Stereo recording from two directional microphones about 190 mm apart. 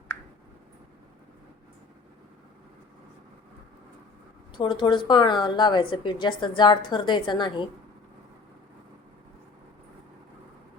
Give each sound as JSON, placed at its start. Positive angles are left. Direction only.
{"t": 4.5, "sound": "a woman's voice", "side_deg": 25}